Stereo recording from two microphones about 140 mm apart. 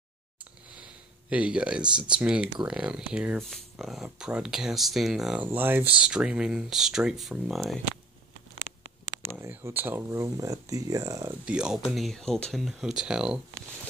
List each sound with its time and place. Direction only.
1.3 s speech: 10° right (ahead or behind)
9.3 s speech: 15° right (ahead or behind)
11.4 s speech: 5° right (ahead or behind)